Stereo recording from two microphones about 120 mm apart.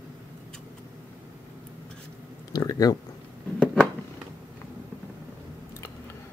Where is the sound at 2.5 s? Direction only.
30° left (ahead or behind).